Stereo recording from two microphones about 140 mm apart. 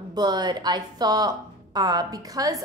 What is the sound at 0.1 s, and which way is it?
A woman's voice, 30° right (ahead or behind).